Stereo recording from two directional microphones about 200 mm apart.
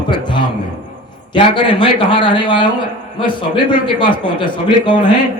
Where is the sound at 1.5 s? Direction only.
25° left (ahead or behind).